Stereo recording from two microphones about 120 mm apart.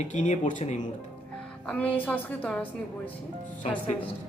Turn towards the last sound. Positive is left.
turn(degrees=65)  # may be behind; listen again after turning